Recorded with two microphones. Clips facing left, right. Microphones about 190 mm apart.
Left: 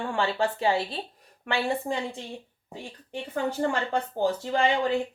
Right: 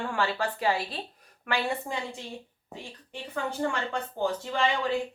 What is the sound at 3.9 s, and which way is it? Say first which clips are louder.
Speech: left 3 dB; 30° left (ahead or behind).